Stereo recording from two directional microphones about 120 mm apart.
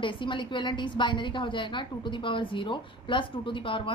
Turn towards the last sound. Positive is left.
turn(degrees=45)  # may be behind; listen again after turning